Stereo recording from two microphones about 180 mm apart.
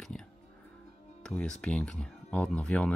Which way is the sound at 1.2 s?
5° left (ahead or behind).